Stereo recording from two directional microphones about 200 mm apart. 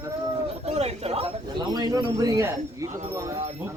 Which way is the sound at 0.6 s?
35° right (ahead or behind).